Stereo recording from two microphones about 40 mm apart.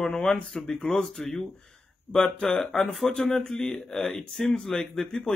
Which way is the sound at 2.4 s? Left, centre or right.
Centre.